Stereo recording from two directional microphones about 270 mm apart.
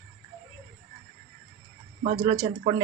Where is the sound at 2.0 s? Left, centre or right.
Centre.